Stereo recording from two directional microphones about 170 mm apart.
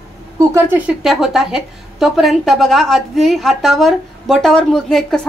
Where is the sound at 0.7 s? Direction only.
5° right (ahead or behind).